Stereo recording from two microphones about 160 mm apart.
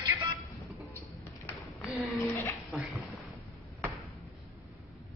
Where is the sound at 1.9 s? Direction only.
Centre (ahead or behind).